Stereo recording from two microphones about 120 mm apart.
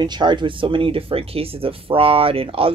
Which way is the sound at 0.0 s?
40° right (ahead or behind).